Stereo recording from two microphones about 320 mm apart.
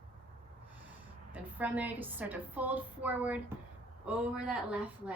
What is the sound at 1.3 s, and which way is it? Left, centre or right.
A woman's voice, centre.